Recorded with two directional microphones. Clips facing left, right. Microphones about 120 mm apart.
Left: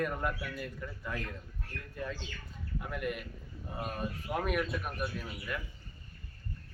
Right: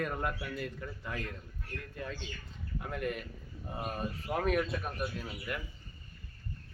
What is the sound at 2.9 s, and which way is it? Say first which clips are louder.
Speech: right 1 dB; 35° right (ahead or behind).